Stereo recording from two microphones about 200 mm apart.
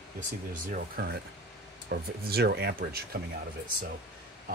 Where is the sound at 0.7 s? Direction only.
50° right (ahead or behind).